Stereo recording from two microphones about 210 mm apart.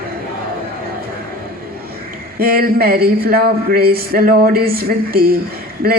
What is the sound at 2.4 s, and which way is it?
Speech, 45° right (ahead or behind).